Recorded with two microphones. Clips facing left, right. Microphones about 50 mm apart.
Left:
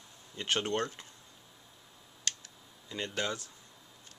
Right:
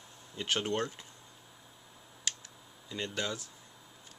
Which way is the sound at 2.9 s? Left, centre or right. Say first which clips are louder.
Left 1 dB; centre.